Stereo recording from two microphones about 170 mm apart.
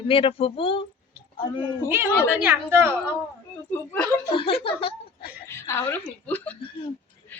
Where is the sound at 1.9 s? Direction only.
10° right (ahead or behind).